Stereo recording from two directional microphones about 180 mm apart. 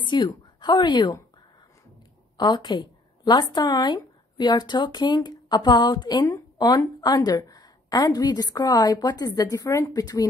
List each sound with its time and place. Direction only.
0.0 s a woman's voice: 25° left (ahead or behind)
2.3 s speech: 25° left (ahead or behind)